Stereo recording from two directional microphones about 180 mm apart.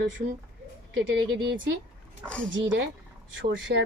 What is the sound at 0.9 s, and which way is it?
Speech, 90° right.